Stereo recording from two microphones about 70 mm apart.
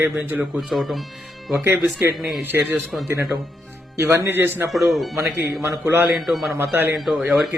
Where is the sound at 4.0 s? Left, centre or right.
Right.